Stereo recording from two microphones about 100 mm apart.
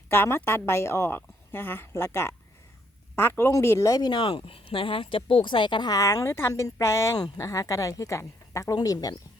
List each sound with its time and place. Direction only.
0.1 s a woman's voice: 25° left (ahead or behind); by 5.9 s 55° left (ahead or behind)
5.9 s speech: 35° left (ahead or behind)